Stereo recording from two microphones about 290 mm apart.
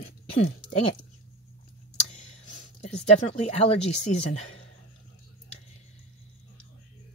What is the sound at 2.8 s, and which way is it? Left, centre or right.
Speech, left.